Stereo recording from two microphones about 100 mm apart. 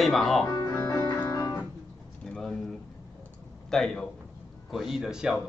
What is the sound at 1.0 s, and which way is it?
Music, 45° left (ahead or behind).